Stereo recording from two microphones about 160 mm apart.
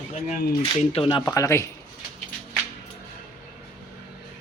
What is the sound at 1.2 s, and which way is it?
Speech, 20° left (ahead or behind).